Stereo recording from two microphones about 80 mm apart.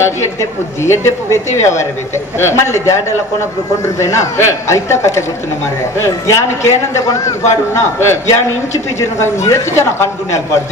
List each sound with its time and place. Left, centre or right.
0.0 s a man's voice: left